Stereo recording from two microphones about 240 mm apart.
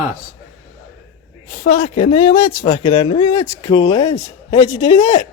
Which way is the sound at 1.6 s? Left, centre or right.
Left.